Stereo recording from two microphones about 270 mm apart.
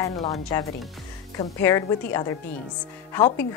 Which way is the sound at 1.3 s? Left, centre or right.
Centre.